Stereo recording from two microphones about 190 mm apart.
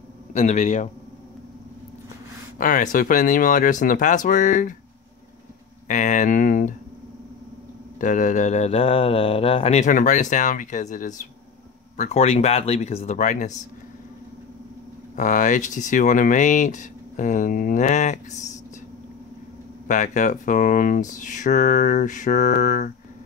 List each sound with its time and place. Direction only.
0.3 s speech: 35° left (ahead or behind)
2.6 s speech: 45° left (ahead or behind)
5.9 s speech: 40° left (ahead or behind)
8.0 s speech: 40° left (ahead or behind)
15.1 s speech: 40° left (ahead or behind)
19.9 s speech: 40° left (ahead or behind)